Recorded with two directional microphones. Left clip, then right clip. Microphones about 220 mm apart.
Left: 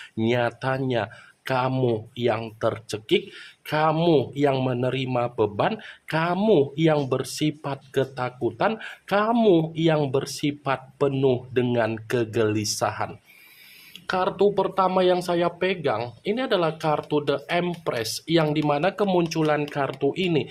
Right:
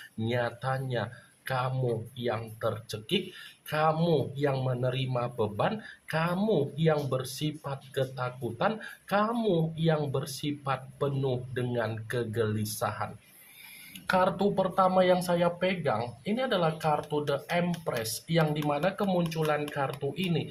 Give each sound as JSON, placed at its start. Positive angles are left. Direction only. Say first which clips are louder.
{"t": 0.3, "sound": "speech", "louder": "left 7 dB", "side_deg": 45}
{"t": 14.1, "sound": "speech", "louder": "left 4 dB", "side_deg": 40}